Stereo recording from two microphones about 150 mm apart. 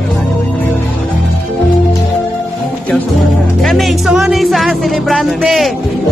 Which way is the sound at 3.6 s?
Centre (ahead or behind).